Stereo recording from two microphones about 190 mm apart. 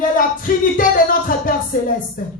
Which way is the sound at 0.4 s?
45° left (ahead or behind).